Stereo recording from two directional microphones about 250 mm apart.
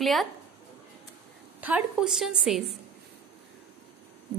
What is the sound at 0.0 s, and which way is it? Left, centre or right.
Speech, centre.